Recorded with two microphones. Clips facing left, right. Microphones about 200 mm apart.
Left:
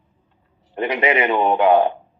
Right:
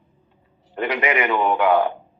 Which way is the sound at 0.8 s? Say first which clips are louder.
Left 3 dB; 20° left (ahead or behind).